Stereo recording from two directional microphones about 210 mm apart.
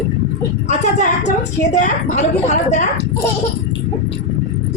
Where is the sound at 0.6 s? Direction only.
35° left (ahead or behind).